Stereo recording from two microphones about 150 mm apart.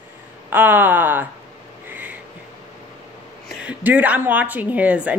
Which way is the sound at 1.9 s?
10° right (ahead or behind).